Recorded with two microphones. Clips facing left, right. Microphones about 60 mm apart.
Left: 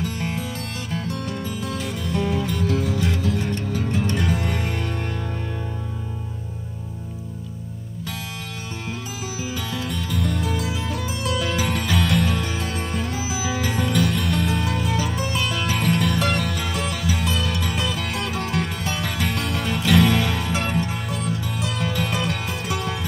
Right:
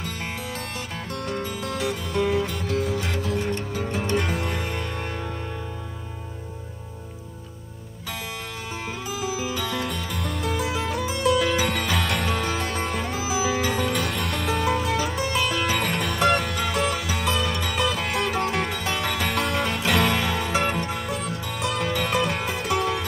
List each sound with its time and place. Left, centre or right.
1.1 s music: centre
3.5 s music: centre
10.1 s music: centre
21.5 s music: right
21.9 s music: centre